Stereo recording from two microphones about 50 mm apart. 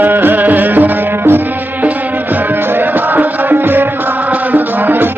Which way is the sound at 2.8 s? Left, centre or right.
Right.